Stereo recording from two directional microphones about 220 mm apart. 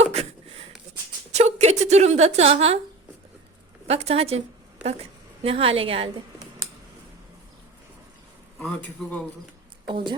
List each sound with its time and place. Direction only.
0.0 s a sound: 30° right (ahead or behind)
1.3 s a woman's voice: 30° right (ahead or behind)
3.8 s a woman's voice: 25° right (ahead or behind)
5.4 s a woman's voice: 25° right (ahead or behind)
8.5 s a man's voice: 5° left (ahead or behind)
9.8 s a woman's voice: 20° right (ahead or behind)